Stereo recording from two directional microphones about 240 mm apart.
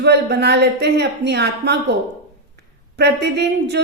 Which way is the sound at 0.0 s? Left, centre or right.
Right.